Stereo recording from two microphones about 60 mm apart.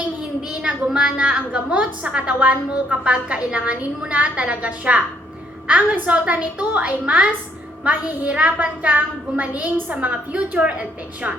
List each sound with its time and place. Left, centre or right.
0.7 s a woman's voice: centre